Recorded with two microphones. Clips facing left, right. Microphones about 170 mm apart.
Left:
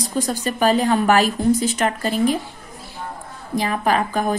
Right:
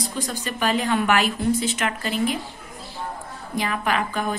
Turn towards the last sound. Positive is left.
turn(degrees=40)  # may be behind; listen again after turning